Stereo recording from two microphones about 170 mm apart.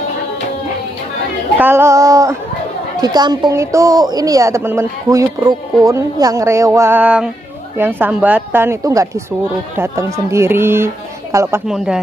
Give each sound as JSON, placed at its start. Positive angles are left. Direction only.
{"t": 1.6, "sound": "child singing", "side_deg": -15}
{"t": 3.0, "sound": "a woman's voice", "side_deg": -25}
{"t": 11.6, "sound": "speech", "side_deg": -5}